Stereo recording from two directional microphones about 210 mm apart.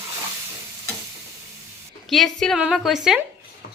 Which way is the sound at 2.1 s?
Centre (ahead or behind).